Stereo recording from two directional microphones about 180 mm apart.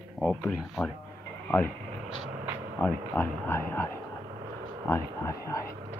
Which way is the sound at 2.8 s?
10° left (ahead or behind).